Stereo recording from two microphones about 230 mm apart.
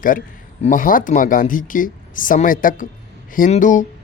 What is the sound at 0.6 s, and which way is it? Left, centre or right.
A woman's voice, left.